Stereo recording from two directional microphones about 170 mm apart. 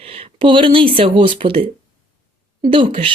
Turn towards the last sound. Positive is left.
turn(degrees=-30)  # may be behind; listen again after turning